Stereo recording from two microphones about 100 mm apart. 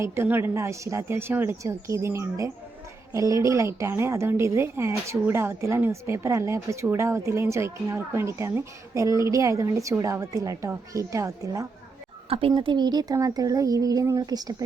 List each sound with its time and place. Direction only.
0.0 s speech: 25° right (ahead or behind)
12.3 s a woman's voice: 65° right (ahead or behind)
12.5 s speech: 45° right (ahead or behind)